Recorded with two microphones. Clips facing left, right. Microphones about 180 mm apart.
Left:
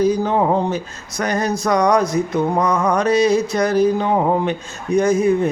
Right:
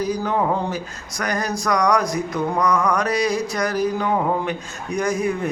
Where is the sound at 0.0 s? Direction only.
25° left (ahead or behind).